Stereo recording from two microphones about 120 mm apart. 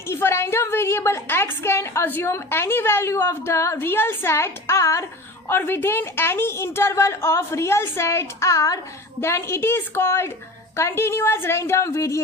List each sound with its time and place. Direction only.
0.1 s a woman's voice: 20° left (ahead or behind)